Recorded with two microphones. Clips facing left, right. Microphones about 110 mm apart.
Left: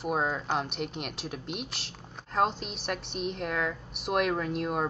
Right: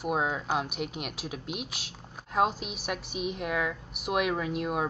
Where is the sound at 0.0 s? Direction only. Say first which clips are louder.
Even; 5° right (ahead or behind).